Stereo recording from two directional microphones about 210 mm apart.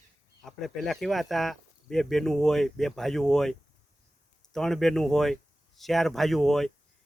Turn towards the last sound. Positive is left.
turn(degrees=0)  # may be behind; listen again after turning